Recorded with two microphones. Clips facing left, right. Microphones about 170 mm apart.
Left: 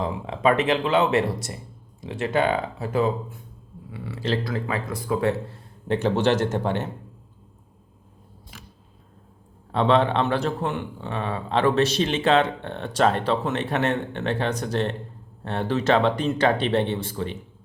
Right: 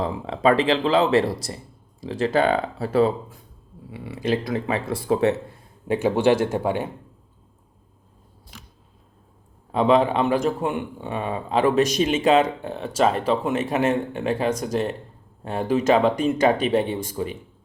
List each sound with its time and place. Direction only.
0.0 s speech: 35° right (ahead or behind)
3.9 s speech: 20° right (ahead or behind)
5.9 s a man's voice: 10° right (ahead or behind)
9.7 s a man's voice: 10° right (ahead or behind)